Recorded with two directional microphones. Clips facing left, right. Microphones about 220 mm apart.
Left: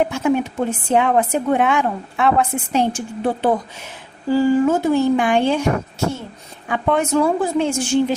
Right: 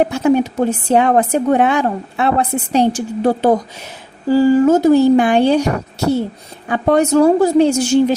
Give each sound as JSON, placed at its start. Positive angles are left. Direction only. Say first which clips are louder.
{"t": 0.0, "sound": "speech", "louder": "right 4 dB", "side_deg": -35}
{"t": 6.7, "sound": "speech", "louder": "right 5 dB", "side_deg": -40}